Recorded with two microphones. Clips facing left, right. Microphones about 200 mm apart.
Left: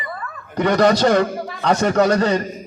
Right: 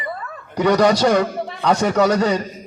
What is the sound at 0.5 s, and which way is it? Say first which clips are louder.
A man's voice: even; 10° right (ahead or behind).